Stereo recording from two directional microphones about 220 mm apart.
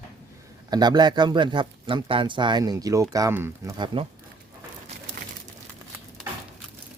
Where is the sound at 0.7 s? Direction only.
20° right (ahead or behind).